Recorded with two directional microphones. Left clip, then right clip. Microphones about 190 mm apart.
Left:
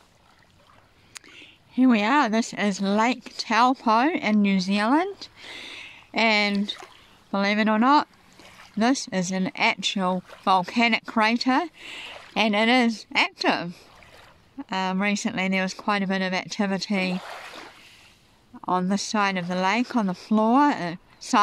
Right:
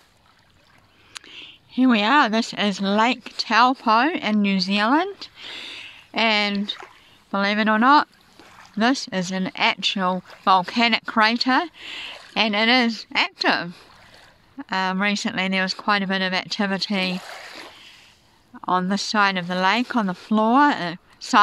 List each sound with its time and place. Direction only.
1.1 s speech: centre (ahead or behind)
18.5 s speech: centre (ahead or behind)